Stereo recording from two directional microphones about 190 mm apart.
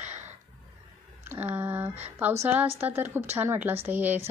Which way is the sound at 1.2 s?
10° right (ahead or behind).